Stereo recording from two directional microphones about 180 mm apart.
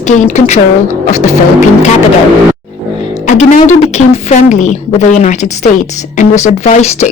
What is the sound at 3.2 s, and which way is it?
Speech, 40° left (ahead or behind).